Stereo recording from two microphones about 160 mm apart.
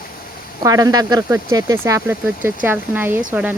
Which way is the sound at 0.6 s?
20° right (ahead or behind).